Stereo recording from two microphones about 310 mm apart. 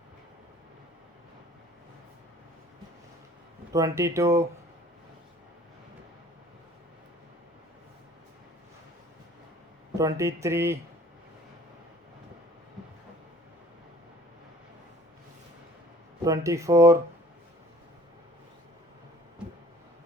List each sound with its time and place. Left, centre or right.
3.7 s speech: centre
10.0 s speech: centre
16.2 s speech: centre